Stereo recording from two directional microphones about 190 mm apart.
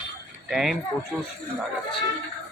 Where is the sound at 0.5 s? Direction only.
Centre (ahead or behind).